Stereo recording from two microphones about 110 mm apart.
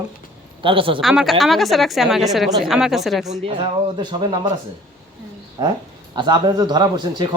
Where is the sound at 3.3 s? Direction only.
55° right (ahead or behind).